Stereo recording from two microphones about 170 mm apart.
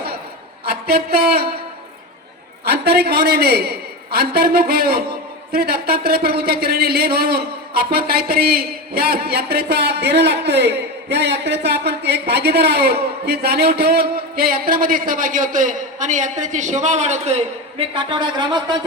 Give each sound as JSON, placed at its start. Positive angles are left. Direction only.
{"t": 0.6, "sound": "a woman's voice", "side_deg": -65}
{"t": 2.6, "sound": "a man's voice", "side_deg": -70}